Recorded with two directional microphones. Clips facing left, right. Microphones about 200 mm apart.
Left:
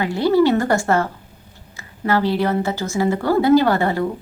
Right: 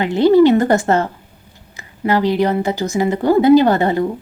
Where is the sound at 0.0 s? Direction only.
20° right (ahead or behind).